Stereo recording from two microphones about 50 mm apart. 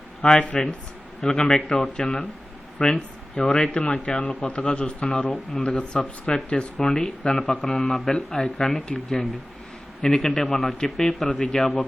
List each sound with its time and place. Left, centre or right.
0.2 s a man's voice: centre
3.7 s a man's voice: left; by 11.0 s centre
11.0 s a man's voice: centre
11.5 s speech: centre